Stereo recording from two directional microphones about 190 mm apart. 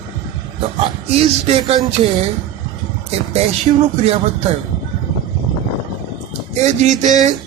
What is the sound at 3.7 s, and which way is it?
Speech, 30° right (ahead or behind).